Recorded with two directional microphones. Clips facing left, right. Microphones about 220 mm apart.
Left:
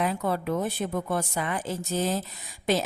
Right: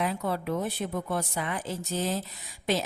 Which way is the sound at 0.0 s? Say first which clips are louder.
Left 2 dB; 50° left (ahead or behind).